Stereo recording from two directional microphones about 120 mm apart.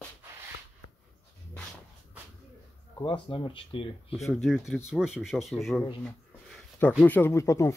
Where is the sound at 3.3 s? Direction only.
45° left (ahead or behind).